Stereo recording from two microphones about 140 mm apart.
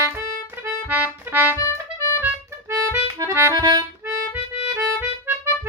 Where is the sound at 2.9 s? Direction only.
15° right (ahead or behind).